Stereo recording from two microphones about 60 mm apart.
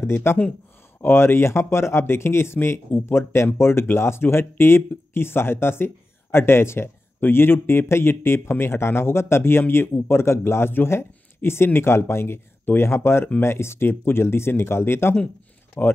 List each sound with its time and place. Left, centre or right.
0.0 s speech: left